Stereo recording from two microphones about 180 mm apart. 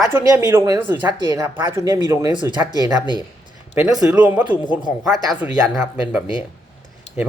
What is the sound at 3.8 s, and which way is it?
A man's voice, 10° right (ahead or behind).